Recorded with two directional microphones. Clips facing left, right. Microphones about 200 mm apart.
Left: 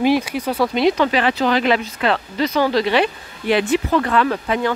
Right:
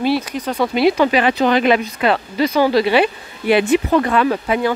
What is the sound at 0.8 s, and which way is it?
Speech, 10° right (ahead or behind).